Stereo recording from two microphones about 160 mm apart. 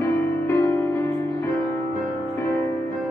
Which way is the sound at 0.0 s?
15° left (ahead or behind).